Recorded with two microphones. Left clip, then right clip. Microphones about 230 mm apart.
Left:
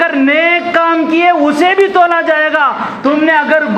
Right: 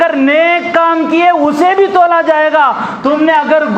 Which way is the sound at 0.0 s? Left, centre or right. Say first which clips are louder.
Right 1 dB; right.